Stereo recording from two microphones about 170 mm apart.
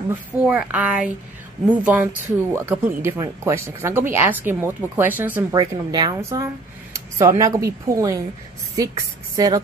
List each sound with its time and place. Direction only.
0.5 s speech: 10° right (ahead or behind)
5.5 s a woman's voice: 20° right (ahead or behind)